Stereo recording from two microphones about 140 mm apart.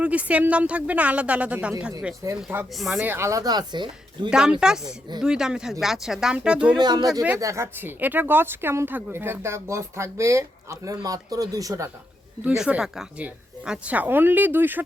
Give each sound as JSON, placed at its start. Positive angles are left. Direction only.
{"t": 0.0, "sound": "a woman's voice", "side_deg": -10}
{"t": 2.2, "sound": "speech", "side_deg": -20}
{"t": 2.7, "sound": "speech", "side_deg": 0}
{"t": 3.0, "sound": "speech", "side_deg": -15}
{"t": 4.3, "sound": "speech", "side_deg": -5}
{"t": 6.7, "sound": "speech", "side_deg": -30}
{"t": 12.5, "sound": "a woman's voice", "side_deg": -10}